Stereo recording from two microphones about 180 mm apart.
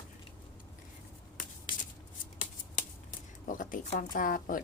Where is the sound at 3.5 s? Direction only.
45° left (ahead or behind).